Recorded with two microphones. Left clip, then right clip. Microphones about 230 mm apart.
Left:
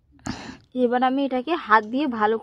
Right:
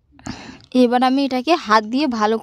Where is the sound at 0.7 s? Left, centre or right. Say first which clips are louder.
Right 5 dB; right.